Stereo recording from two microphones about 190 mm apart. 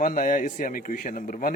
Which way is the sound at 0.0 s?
45° left (ahead or behind).